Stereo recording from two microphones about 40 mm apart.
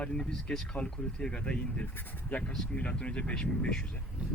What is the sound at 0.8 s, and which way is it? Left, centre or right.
Speech, left.